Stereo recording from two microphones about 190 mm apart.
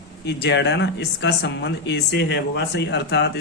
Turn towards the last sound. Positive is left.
turn(degrees=60)  # may be behind; listen again after turning